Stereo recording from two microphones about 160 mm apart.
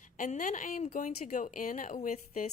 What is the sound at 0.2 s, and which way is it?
A woman's voice, 55° left (ahead or behind).